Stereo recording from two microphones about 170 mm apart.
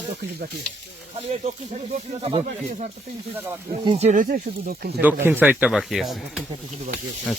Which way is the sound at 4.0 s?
45° right (ahead or behind).